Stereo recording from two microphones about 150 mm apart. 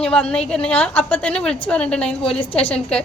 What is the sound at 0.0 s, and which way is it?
A woman's voice, 5° left (ahead or behind).